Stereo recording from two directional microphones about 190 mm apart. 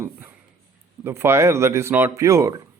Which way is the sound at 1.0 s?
10° right (ahead or behind).